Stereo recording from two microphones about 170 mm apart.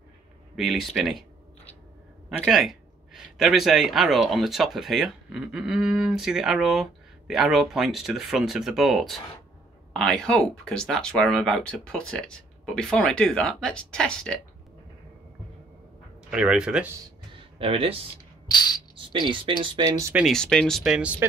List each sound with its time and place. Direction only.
0.6 s speech: centre (ahead or behind)
2.2 s speech: 5° right (ahead or behind)
16.3 s speech: 5° right (ahead or behind)
17.6 s speech: 35° right (ahead or behind)
18.5 s a sound: 25° left (ahead or behind)
18.9 s speech: 30° right (ahead or behind)
20.2 s speech: centre (ahead or behind)